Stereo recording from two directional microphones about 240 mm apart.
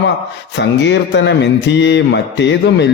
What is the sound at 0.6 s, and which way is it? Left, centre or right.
Speech, left.